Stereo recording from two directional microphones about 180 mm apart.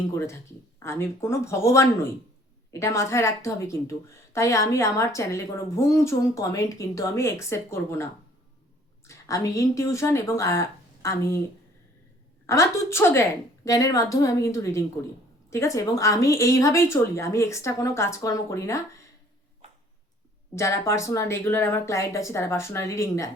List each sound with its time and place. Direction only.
0.1 s a woman's voice: 15° left (ahead or behind)
12.5 s a woman's voice: 15° left (ahead or behind)
20.6 s a woman's voice: 15° left (ahead or behind)